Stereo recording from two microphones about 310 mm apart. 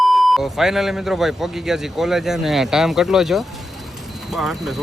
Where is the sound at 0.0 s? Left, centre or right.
Centre.